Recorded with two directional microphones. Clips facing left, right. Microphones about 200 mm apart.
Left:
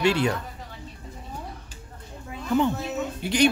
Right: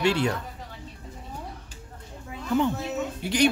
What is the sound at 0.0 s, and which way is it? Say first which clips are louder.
Speech: left 1 dB; 15° left (ahead or behind).